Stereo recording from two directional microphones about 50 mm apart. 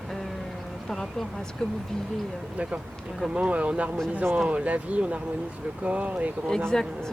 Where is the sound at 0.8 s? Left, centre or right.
Centre.